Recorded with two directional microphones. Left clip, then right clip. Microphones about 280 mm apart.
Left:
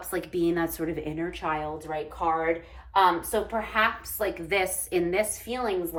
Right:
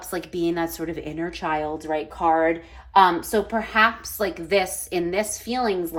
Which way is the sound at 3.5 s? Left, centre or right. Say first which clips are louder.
Right 6 dB; centre.